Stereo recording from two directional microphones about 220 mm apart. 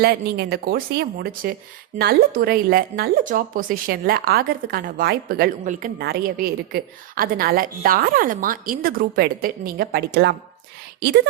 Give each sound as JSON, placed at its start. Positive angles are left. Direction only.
{"t": 0.0, "sound": "a woman's voice", "side_deg": -45}